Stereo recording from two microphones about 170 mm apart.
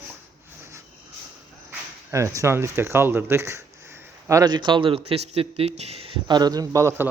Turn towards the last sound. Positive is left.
turn(degrees=-15)  # may be behind; listen again after turning